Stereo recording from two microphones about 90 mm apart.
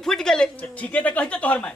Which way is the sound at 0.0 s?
5° left (ahead or behind).